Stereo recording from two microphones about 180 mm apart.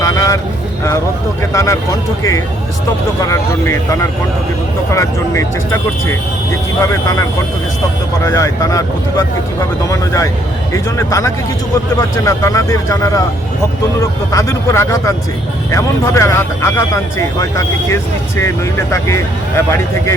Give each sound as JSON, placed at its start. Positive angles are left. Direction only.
{"t": 0.0, "sound": "a sound", "side_deg": 20}
{"t": 1.4, "sound": "speech", "side_deg": 15}
{"t": 6.8, "sound": "speech", "side_deg": 15}
{"t": 18.9, "sound": "speech", "side_deg": 15}